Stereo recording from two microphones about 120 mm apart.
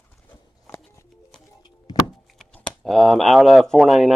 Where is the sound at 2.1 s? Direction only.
Centre (ahead or behind).